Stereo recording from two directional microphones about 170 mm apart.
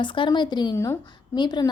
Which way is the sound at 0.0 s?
30° left (ahead or behind).